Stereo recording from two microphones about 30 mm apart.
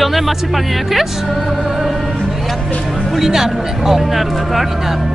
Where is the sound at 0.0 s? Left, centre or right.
Centre.